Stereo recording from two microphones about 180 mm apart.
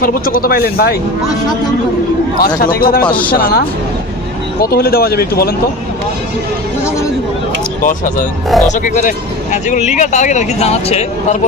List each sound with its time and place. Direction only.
0.0 s speech: 55° left (ahead or behind)
2.6 s speech: 55° left (ahead or behind)
7.8 s speech: 45° left (ahead or behind)